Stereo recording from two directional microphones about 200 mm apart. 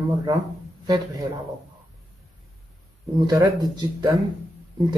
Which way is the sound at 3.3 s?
20° right (ahead or behind).